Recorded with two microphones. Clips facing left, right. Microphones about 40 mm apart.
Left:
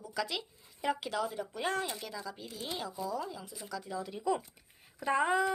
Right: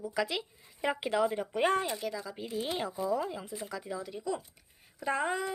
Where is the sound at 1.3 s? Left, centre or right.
Right.